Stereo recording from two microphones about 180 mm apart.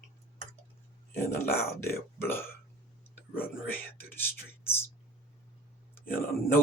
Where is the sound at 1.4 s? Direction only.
15° left (ahead or behind).